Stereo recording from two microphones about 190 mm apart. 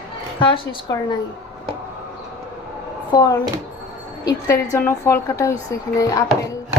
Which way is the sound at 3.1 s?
20° left (ahead or behind).